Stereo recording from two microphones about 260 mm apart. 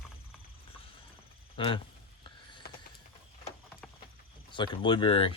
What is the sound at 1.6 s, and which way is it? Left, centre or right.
Speech, centre.